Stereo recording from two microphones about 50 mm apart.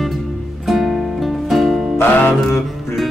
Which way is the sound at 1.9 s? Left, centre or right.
Left.